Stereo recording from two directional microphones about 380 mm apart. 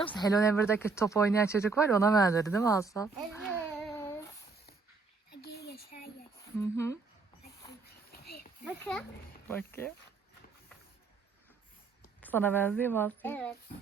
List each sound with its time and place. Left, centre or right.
0.0 s speech: centre
5.3 s a sound: left
6.6 s speech: centre
8.1 s a sound: left
8.6 s a woman's voice: centre
12.2 s a woman's voice: centre